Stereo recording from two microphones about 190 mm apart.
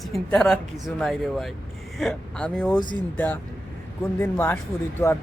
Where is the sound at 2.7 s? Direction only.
25° left (ahead or behind).